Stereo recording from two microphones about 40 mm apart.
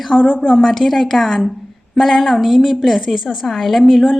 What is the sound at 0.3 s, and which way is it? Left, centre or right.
Speech, centre.